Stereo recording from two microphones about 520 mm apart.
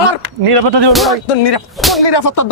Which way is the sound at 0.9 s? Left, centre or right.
Centre.